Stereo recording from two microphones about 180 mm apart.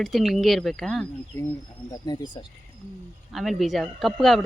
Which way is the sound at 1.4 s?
20° left (ahead or behind).